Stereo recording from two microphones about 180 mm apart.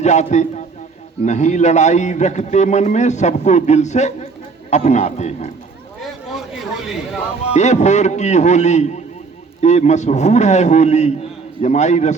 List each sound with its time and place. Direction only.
0.0 s a man's voice: 40° left (ahead or behind)
6.0 s a sound: centre (ahead or behind)
7.5 s a man's voice: 40° left (ahead or behind)